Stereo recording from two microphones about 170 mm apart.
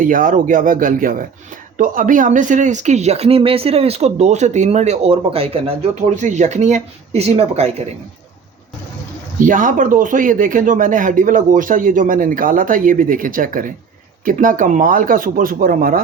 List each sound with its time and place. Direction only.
0.0 s speech: 50° right (ahead or behind)
9.4 s speech: 50° right (ahead or behind)